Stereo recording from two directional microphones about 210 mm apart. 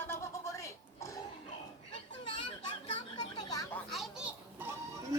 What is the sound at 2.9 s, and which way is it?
Children playing, 20° left (ahead or behind).